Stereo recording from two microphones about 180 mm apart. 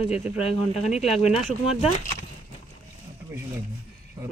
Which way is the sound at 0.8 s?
35° left (ahead or behind).